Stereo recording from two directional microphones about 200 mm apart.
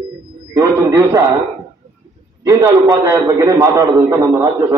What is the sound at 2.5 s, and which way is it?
A man's voice, 15° right (ahead or behind).